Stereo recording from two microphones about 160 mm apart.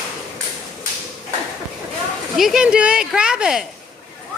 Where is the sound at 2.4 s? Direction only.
Centre (ahead or behind).